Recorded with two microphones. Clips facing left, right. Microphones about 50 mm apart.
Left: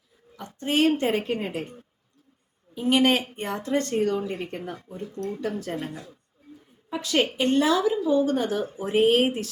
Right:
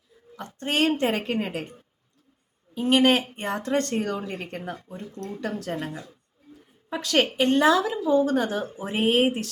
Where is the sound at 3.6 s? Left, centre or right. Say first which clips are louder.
Left 2 dB; right.